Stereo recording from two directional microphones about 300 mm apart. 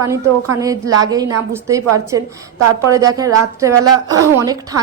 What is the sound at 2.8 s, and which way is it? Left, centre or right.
A woman's voice, centre.